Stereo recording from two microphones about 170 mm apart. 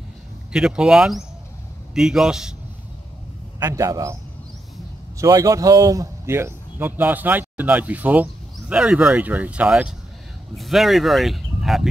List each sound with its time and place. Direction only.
0.5 s speech: 5° right (ahead or behind)
3.5 s speech: 15° right (ahead or behind); by 11.9 s centre (ahead or behind)